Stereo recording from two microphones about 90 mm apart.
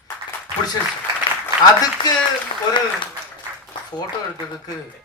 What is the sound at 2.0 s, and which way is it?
Speech, 65° left (ahead or behind).